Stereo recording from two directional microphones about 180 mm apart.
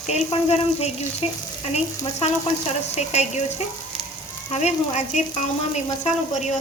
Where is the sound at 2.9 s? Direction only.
40° left (ahead or behind).